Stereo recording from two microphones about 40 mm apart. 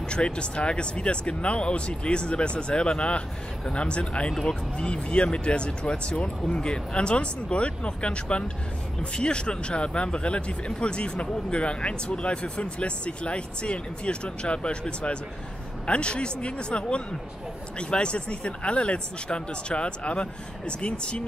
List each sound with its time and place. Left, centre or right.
0.1 s speech: left
4.3 s speech: centre
4.8 s speech: left